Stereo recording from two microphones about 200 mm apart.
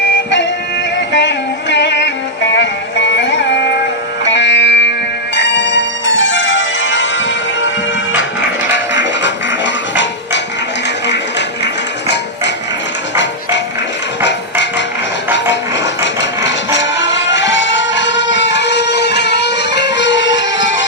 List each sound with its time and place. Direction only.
1.1 s music: 60° left (ahead or behind)
5.3 s change ringing: 60° left (ahead or behind)
8.1 s music: 65° left (ahead or behind)
16.4 s music: 65° left (ahead or behind)